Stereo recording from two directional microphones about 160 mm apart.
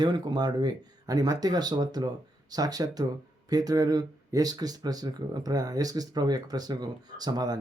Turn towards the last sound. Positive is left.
turn(degrees=-25)  # may be behind; listen again after turning